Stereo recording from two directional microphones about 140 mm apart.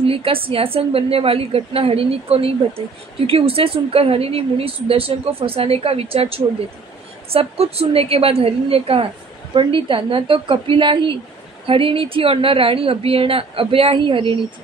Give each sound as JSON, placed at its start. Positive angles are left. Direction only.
{"t": 0.0, "sound": "a woman's voice", "side_deg": -40}